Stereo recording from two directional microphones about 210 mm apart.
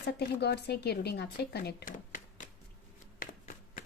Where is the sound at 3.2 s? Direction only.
40° left (ahead or behind).